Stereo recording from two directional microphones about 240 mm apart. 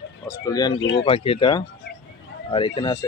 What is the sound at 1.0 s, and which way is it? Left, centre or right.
Speech, left.